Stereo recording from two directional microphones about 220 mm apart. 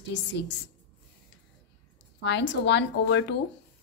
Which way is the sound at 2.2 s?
55° left (ahead or behind).